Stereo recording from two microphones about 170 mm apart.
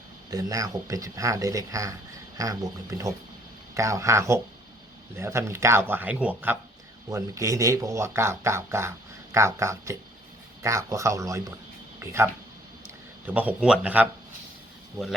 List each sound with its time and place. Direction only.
0.3 s speech: 20° right (ahead or behind)